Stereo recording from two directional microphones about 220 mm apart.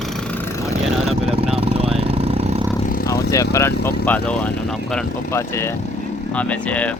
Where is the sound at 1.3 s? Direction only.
25° right (ahead or behind).